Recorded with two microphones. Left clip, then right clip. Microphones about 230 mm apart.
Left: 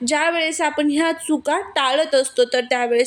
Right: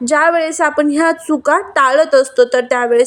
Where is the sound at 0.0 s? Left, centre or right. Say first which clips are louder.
Right 7 dB; centre.